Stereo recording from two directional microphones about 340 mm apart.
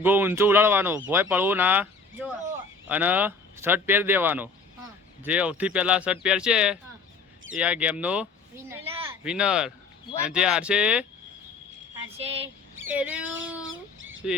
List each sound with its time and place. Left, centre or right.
0.0 s speech: centre
12.1 s speech: centre
12.9 s speech: centre
13.2 s speech: right
13.7 s fowl: right